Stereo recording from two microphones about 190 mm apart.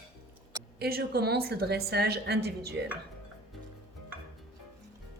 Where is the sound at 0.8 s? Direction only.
55° right (ahead or behind).